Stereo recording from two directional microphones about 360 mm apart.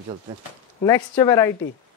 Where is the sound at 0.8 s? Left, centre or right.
Centre.